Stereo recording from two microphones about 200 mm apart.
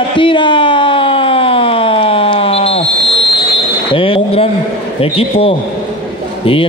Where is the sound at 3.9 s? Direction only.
25° left (ahead or behind).